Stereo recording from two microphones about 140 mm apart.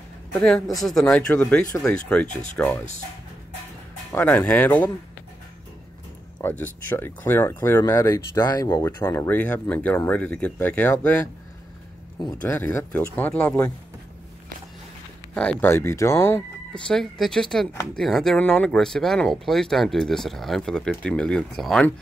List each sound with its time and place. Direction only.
0.3 s speech: 5° left (ahead or behind)
4.2 s speech: 10° left (ahead or behind)
6.4 s speech: 15° left (ahead or behind)
12.4 s speech: 15° left (ahead or behind)
15.3 s speech: 10° left (ahead or behind)
16.7 s speech: 5° left (ahead or behind)